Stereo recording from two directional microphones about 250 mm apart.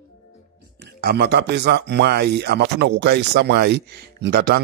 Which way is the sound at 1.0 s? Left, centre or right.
Right.